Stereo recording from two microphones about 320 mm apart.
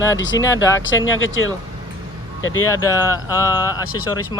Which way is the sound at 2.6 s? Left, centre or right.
Centre.